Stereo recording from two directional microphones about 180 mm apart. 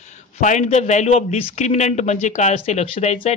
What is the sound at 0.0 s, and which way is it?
A man's voice, 45° left (ahead or behind).